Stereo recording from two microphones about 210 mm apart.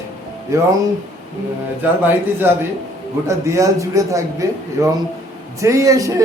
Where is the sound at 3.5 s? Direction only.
15° right (ahead or behind).